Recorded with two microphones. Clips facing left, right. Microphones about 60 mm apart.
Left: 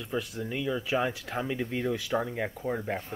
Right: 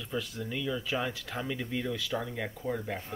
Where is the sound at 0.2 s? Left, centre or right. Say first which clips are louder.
Left 2 dB; centre.